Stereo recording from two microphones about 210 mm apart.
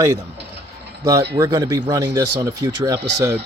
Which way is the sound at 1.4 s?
15° right (ahead or behind).